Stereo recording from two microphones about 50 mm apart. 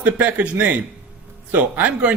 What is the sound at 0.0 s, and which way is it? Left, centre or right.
Speech, right.